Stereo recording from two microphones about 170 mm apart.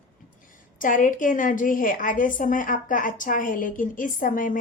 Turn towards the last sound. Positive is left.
turn(degrees=50)  # may be behind; listen again after turning